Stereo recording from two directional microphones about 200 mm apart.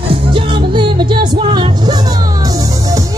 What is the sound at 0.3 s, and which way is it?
Music, 25° right (ahead or behind).